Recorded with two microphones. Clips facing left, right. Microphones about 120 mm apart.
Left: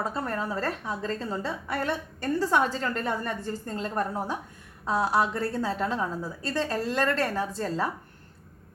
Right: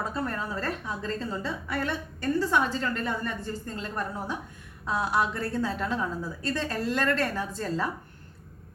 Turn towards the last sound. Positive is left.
turn(degrees=30)  # may be behind; listen again after turning